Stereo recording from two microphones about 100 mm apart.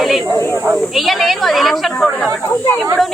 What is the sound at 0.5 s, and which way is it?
Snake, 25° right (ahead or behind).